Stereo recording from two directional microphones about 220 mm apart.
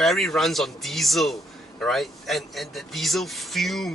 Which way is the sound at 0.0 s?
Centre (ahead or behind).